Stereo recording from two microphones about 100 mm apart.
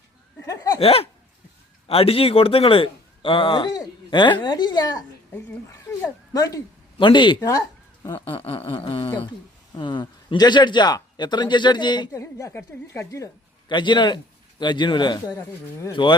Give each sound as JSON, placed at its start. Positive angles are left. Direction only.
{"t": 0.4, "sound": "a sound", "side_deg": 35}
{"t": 0.8, "sound": "a sound", "side_deg": 75}
{"t": 1.9, "sound": "speech", "side_deg": 70}
{"t": 5.7, "sound": "speech", "side_deg": 35}
{"t": 7.0, "sound": "speech", "side_deg": 50}
{"t": 8.2, "sound": "a sound", "side_deg": 65}
{"t": 9.7, "sound": "speech", "side_deg": 50}
{"t": 12.1, "sound": "a woman's voice", "side_deg": 30}
{"t": 13.7, "sound": "speech", "side_deg": 50}